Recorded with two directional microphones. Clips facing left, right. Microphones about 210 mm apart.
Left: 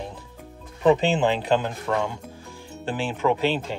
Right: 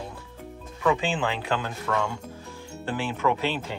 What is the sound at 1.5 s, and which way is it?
Speech, 20° left (ahead or behind).